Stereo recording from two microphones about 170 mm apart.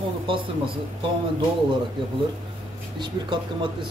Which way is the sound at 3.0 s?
30° right (ahead or behind).